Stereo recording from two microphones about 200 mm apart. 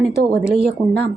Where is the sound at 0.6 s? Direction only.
55° right (ahead or behind).